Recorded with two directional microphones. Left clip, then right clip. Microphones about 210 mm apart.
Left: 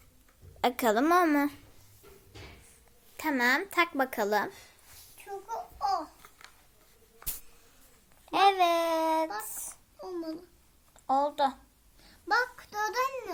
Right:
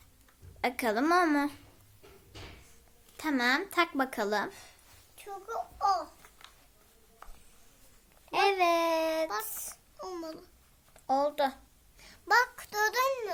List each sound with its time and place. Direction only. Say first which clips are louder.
0.6 s a woman's voice: left 3 dB; 15° left (ahead or behind)
3.2 s a woman's voice: left 2 dB; 10° left (ahead or behind)
5.1 s a sound: even; 15° right (ahead or behind)
8.3 s a woman's voice: left 2 dB; 10° left (ahead or behind)
11.0 s a child's voice: left 1 dB; centre (ahead or behind)
12.0 s a sound: right 2 dB; 45° right (ahead or behind)